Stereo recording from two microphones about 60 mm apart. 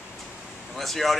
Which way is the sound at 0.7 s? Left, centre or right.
Centre.